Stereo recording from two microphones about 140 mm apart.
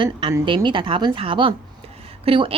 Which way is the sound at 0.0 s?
35° right (ahead or behind).